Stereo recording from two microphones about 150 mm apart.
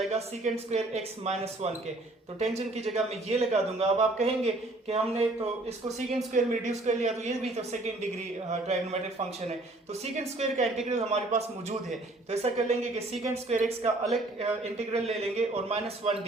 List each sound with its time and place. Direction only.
0.1 s speech: 45° right (ahead or behind)
6.3 s speech: 55° right (ahead or behind)
8.4 s speech: 45° right (ahead or behind)